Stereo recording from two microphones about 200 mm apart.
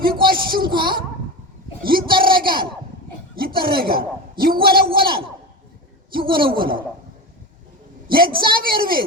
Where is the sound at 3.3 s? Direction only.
50° right (ahead or behind).